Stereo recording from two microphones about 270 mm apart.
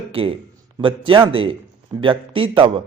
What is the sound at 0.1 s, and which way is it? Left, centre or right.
A man's voice, centre.